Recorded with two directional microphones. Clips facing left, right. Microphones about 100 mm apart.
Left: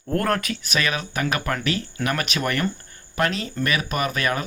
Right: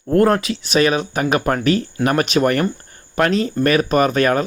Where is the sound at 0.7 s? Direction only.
35° right (ahead or behind).